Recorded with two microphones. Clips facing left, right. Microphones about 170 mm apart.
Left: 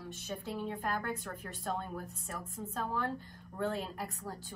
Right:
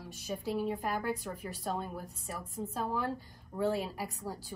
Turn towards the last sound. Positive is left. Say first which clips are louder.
# right 2 dB
turn(degrees=-5)  # may be behind; listen again after turning